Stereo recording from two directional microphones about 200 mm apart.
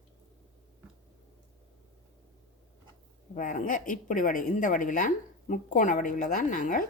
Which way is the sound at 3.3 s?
40° left (ahead or behind).